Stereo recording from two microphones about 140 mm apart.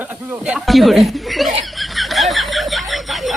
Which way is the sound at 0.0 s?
10° right (ahead or behind).